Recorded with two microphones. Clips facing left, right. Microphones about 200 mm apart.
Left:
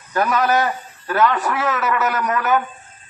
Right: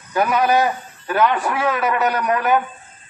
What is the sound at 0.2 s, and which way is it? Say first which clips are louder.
A man's voice: right 1 dB; 15° right (ahead or behind).